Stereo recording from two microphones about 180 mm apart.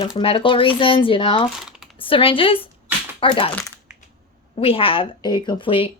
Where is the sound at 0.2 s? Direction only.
30° left (ahead or behind).